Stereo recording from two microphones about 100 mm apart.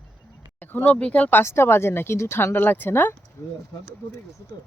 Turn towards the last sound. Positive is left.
turn(degrees=20)  # may be behind; listen again after turning